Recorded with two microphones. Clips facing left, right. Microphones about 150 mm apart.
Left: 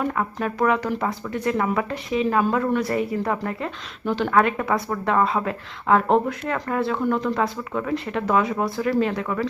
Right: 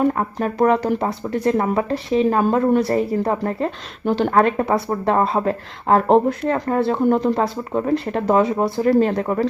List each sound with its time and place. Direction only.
0.1 s speech: 35° right (ahead or behind)